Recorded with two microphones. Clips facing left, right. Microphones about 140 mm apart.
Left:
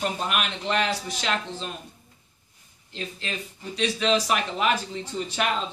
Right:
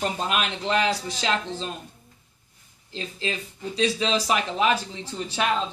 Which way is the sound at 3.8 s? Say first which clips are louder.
Even; 30° right (ahead or behind).